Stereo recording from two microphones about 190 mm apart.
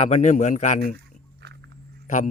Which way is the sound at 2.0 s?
45° left (ahead or behind).